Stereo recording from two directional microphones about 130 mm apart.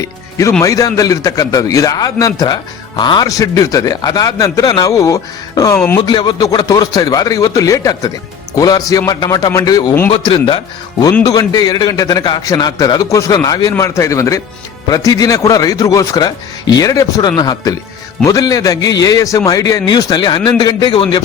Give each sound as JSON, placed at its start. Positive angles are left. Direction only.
{"t": 0.0, "sound": "a man's voice", "side_deg": 25}
{"t": 6.0, "sound": "a man's voice", "side_deg": 35}
{"t": 10.1, "sound": "speech", "side_deg": 45}
{"t": 11.2, "sound": "a man's voice", "side_deg": 30}